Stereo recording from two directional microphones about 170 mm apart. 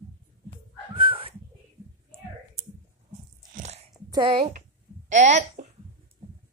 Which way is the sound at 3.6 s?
40° right (ahead or behind).